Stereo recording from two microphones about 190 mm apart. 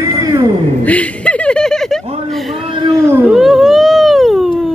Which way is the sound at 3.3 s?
Centre (ahead or behind).